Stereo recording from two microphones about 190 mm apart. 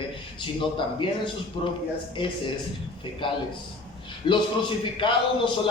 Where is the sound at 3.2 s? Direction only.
25° left (ahead or behind).